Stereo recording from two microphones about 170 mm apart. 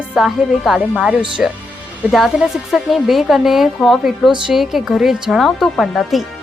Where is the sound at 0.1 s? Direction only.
Centre (ahead or behind).